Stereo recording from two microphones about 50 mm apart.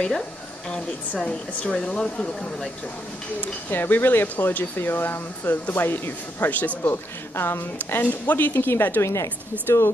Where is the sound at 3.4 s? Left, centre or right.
Left.